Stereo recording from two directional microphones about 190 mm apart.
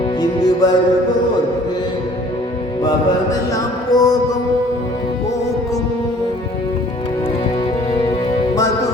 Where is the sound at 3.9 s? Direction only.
20° left (ahead or behind).